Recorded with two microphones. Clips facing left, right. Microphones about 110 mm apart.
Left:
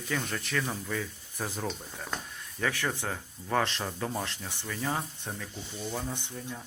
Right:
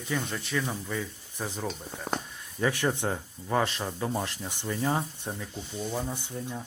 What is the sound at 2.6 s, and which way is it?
Speech, 20° right (ahead or behind).